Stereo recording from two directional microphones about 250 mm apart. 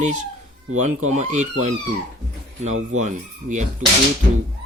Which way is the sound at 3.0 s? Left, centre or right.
Right.